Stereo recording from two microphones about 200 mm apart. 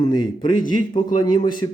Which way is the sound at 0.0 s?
20° left (ahead or behind).